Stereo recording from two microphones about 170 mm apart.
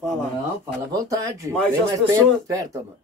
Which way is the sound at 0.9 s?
20° right (ahead or behind).